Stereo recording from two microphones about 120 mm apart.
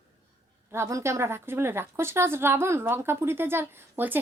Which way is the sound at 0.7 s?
25° right (ahead or behind).